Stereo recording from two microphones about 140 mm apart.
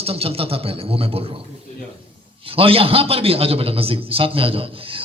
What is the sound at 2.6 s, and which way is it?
A man's voice, 40° right (ahead or behind).